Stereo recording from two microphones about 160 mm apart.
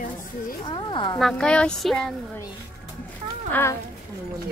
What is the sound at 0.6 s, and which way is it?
Speech, 30° left (ahead or behind).